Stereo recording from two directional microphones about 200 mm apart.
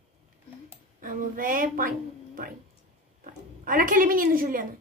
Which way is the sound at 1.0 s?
45° right (ahead or behind).